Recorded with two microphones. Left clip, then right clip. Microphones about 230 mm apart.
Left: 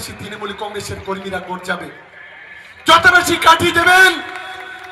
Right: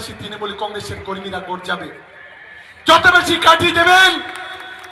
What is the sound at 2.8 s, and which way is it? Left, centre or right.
A man's voice, left.